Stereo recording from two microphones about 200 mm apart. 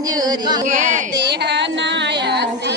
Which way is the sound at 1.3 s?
60° right (ahead or behind).